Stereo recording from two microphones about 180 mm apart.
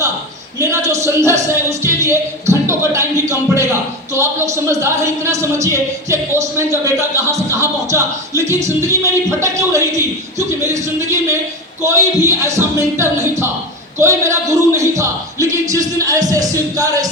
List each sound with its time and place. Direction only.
0.6 s speech: 15° right (ahead or behind)